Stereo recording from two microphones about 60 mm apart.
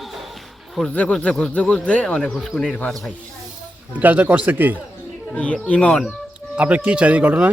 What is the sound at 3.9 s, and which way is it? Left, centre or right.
Speech, right.